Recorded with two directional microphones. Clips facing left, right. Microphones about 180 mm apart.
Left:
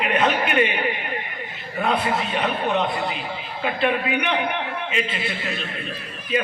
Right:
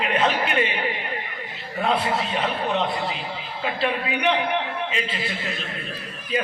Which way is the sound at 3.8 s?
30° right (ahead or behind).